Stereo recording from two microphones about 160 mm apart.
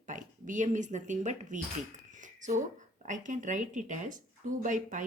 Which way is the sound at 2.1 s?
50° right (ahead or behind).